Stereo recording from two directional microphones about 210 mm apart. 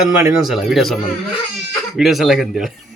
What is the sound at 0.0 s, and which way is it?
Speech, 10° right (ahead or behind).